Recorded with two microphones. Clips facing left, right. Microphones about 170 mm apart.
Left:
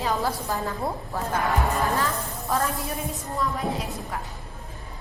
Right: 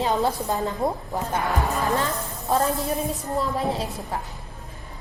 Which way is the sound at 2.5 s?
25° right (ahead or behind).